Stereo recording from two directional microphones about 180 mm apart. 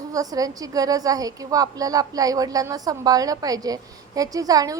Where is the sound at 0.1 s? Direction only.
20° right (ahead or behind).